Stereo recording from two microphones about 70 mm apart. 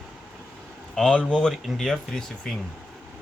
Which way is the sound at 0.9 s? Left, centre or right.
Centre.